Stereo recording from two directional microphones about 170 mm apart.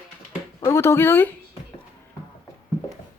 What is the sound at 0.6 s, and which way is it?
Speech, 15° left (ahead or behind).